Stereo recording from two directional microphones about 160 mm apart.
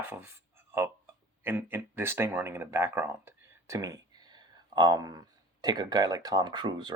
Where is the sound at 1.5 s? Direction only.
15° right (ahead or behind).